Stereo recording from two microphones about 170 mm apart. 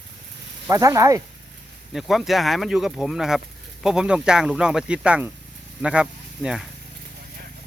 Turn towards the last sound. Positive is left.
turn(degrees=-5)  # may be behind; listen again after turning